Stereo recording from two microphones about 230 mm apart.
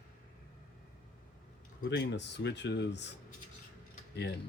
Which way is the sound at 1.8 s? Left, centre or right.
Left.